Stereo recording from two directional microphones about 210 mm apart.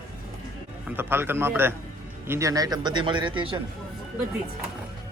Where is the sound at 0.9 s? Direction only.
10° right (ahead or behind).